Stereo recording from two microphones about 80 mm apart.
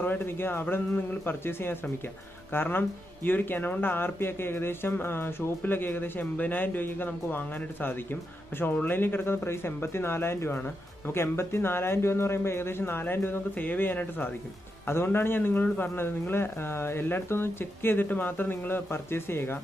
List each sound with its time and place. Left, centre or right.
0.0 s speech: left